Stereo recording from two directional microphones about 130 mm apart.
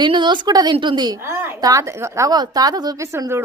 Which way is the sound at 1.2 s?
20° right (ahead or behind).